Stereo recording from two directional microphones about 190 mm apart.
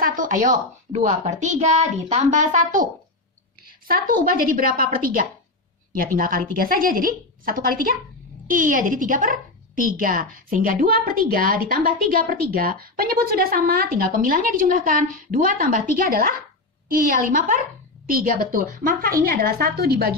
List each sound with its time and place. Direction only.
0.0 s a woman's voice: 45° right (ahead or behind)